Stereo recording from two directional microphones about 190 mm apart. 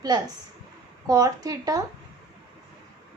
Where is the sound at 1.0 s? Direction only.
20° right (ahead or behind).